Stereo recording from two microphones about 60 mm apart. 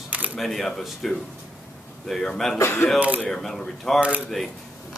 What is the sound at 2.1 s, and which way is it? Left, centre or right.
Speech, centre.